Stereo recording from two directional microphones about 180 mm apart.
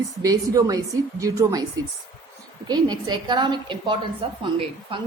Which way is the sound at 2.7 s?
25° right (ahead or behind).